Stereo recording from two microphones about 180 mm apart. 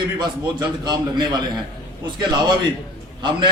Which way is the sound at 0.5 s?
25° right (ahead or behind).